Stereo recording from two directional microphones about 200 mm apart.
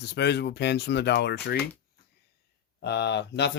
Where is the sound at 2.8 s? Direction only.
55° left (ahead or behind).